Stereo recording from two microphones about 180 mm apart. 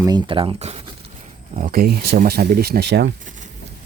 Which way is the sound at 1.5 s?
50° right (ahead or behind).